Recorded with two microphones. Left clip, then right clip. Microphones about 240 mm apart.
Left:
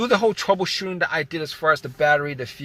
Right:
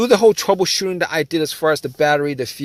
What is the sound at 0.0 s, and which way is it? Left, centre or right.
Speech, right.